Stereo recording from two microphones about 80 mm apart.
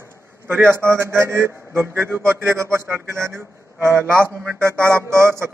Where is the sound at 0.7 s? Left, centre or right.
Right.